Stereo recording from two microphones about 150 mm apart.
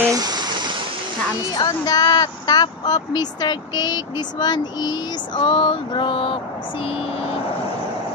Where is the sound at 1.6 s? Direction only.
25° left (ahead or behind).